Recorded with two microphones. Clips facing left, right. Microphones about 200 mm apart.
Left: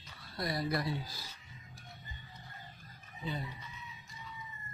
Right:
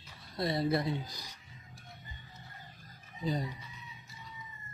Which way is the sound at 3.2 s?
40° right (ahead or behind).